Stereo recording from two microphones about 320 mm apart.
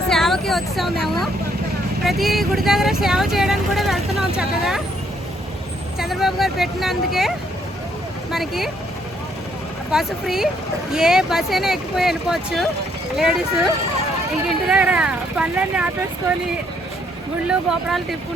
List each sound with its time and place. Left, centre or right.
0.1 s a sound: centre
2.0 s speech: centre
6.0 s speech: centre
9.9 s speech: centre
14.7 s speech: centre
17.5 s speech: centre